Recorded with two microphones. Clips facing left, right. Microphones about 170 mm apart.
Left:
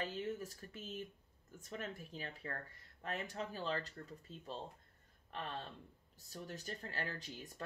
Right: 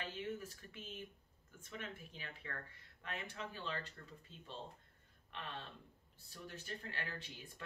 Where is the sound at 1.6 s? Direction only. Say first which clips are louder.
Left 3 dB; 40° left (ahead or behind).